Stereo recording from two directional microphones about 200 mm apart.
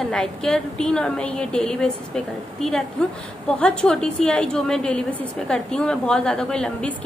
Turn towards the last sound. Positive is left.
turn(degrees=5)  # may be behind; listen again after turning